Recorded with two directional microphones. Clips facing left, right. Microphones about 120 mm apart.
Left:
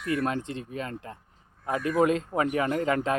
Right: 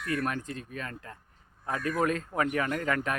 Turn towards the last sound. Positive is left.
turn(degrees=25)  # may be behind; listen again after turning